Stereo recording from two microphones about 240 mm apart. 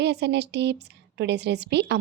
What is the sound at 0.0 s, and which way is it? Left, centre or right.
A woman's voice, right.